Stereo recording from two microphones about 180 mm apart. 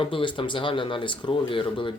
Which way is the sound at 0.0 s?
30° left (ahead or behind).